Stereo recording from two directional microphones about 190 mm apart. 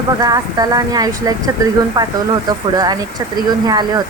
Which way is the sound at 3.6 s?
20° right (ahead or behind).